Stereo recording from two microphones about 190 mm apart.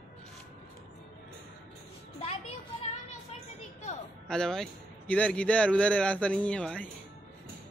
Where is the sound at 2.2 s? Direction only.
30° left (ahead or behind).